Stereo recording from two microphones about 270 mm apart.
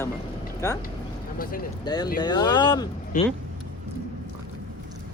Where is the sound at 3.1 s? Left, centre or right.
Left.